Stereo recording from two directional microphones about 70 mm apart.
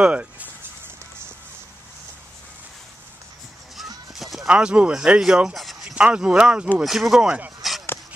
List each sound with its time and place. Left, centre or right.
0.0 s a sound: centre
4.1 s horse: centre
4.5 s speech: centre
5.9 s speech: centre
6.8 s speech: centre
7.6 s a sound: centre